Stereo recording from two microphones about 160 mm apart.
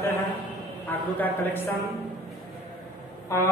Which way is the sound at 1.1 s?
10° left (ahead or behind).